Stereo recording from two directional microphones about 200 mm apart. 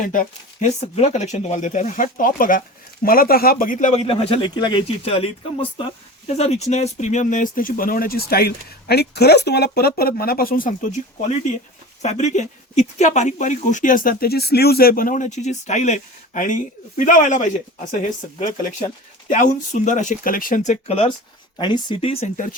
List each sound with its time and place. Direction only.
0.0 s speech: 40° left (ahead or behind)
19.3 s speech: 40° left (ahead or behind)